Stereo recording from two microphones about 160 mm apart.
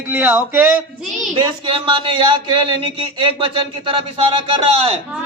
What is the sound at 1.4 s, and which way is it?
A man's voice, 30° right (ahead or behind).